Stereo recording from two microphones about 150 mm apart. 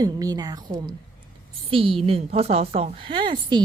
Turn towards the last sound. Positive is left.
turn(degrees=-30)  # may be behind; listen again after turning